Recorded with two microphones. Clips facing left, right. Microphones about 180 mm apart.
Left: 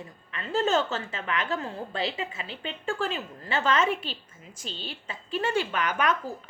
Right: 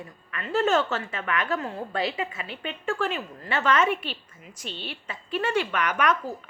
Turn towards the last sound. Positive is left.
turn(degrees=30)  # may be behind; listen again after turning